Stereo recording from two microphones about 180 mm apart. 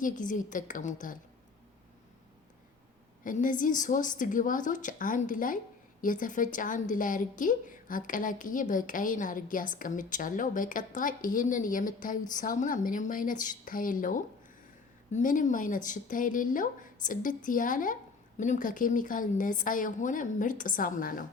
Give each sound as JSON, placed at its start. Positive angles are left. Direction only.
{"t": 0.0, "sound": "a woman's voice", "side_deg": 45}
{"t": 3.2, "sound": "a woman's voice", "side_deg": 45}